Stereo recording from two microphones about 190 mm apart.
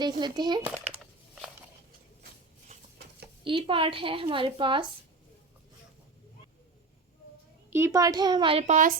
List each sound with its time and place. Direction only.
0.0 s a woman's voice: 20° right (ahead or behind)
0.6 s a sound: 5° right (ahead or behind)
3.4 s a woman's voice: 25° right (ahead or behind)
7.7 s a woman's voice: 15° right (ahead or behind); by 9.0 s 40° right (ahead or behind)